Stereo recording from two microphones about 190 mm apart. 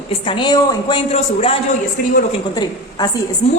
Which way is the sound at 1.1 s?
35° left (ahead or behind).